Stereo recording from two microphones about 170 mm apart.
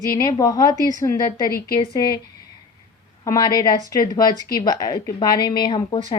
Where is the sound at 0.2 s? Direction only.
20° left (ahead or behind).